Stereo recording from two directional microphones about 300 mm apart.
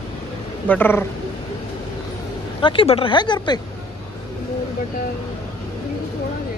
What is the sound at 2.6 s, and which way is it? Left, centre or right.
Speech, centre.